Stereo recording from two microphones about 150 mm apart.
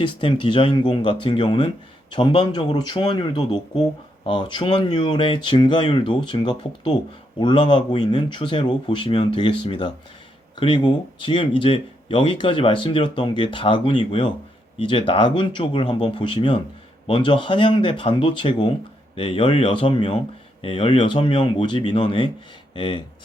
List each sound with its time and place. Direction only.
0.0 s speech: 35° left (ahead or behind)